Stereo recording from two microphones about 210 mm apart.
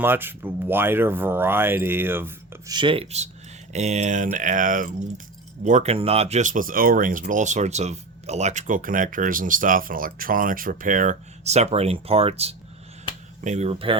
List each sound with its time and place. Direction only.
0.0 s speech: 10° right (ahead or behind)
2.7 s speech: 25° right (ahead or behind)